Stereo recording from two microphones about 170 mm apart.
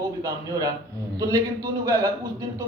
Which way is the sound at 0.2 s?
20° right (ahead or behind).